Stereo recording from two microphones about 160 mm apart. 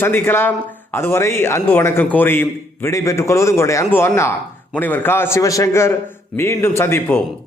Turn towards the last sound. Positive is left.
turn(degrees=15)  # may be behind; listen again after turning